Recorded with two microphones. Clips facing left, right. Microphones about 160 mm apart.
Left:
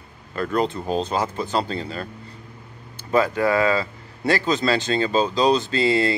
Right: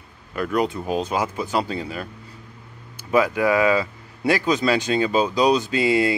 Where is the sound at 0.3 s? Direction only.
10° right (ahead or behind).